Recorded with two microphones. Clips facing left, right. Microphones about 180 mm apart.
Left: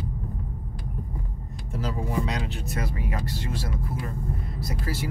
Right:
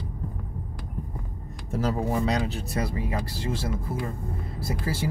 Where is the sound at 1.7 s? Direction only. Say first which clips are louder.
Right 5 dB; 40° right (ahead or behind).